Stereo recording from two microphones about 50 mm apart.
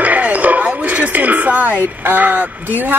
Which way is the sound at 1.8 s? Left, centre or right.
Right.